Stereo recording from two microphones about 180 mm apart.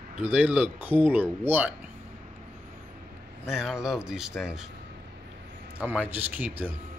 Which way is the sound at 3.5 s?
5° right (ahead or behind).